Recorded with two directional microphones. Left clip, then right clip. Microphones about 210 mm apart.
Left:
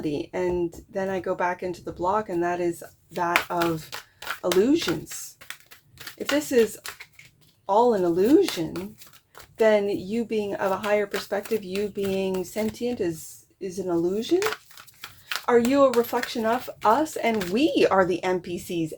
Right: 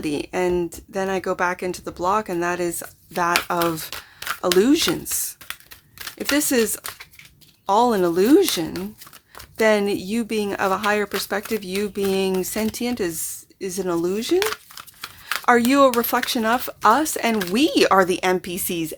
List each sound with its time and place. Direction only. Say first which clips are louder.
0.0 s speech: right 4 dB; 30° right (ahead or behind)
3.8 s a sound: right 5 dB; 10° right (ahead or behind)
4.6 s speech: right 4 dB; 35° right (ahead or behind)
6.3 s speech: right 1 dB; 35° right (ahead or behind)
15.4 s speech: right 4 dB; 35° right (ahead or behind)